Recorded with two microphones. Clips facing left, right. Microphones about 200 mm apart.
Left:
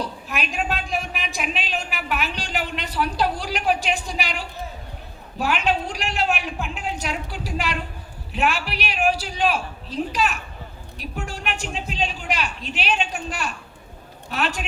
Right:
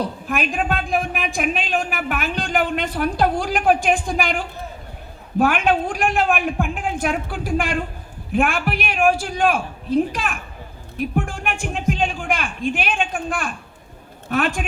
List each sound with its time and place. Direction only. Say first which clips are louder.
0.0 s a woman's voice: right 5 dB; 50° right (ahead or behind)